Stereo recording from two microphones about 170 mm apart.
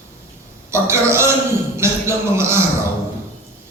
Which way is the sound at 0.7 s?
15° right (ahead or behind).